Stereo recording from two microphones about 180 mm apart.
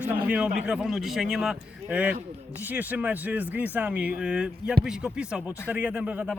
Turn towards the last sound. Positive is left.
turn(degrees=-5)  # may be behind; listen again after turning